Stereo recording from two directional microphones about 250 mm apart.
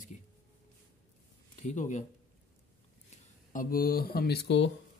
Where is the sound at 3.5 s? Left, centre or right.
Left.